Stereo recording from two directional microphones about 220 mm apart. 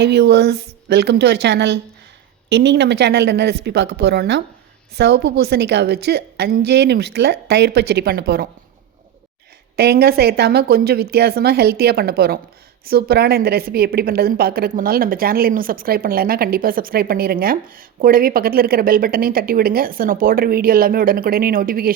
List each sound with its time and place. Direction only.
0.0 s a woman's voice: 50° right (ahead or behind)
9.7 s a woman's voice: 45° right (ahead or behind)